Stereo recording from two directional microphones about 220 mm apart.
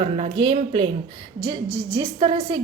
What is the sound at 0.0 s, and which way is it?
A woman's voice, 25° right (ahead or behind).